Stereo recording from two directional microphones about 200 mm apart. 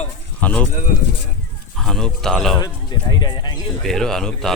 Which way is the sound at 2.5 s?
20° left (ahead or behind).